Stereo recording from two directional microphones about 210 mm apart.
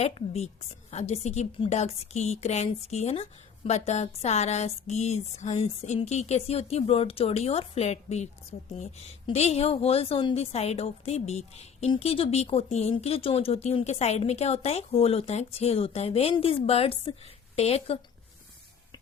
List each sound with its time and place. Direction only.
0.0 s a woman's voice: 30° left (ahead or behind)